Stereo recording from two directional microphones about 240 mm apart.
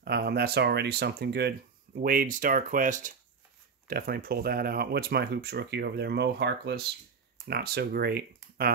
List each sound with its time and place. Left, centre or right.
0.0 s speech: right